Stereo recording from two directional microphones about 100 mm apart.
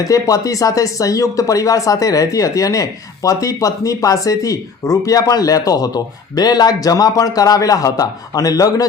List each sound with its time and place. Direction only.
0.0 s speech: 35° left (ahead or behind)